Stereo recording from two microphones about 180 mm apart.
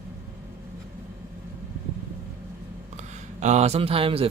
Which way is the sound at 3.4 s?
40° right (ahead or behind).